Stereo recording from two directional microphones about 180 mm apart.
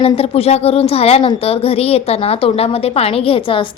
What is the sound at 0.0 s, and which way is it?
A woman's voice, 35° left (ahead or behind).